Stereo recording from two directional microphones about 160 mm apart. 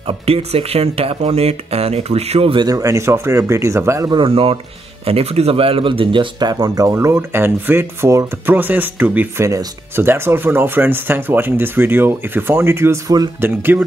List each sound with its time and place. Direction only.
0.0 s speech: 40° right (ahead or behind); by 13.8 s 15° right (ahead or behind)